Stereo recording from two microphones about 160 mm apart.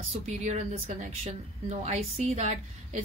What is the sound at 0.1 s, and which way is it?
A woman's voice, 50° right (ahead or behind).